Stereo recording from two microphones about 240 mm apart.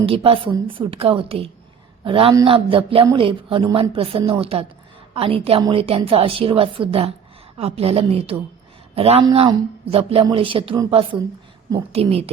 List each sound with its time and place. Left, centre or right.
0.0 s speech: right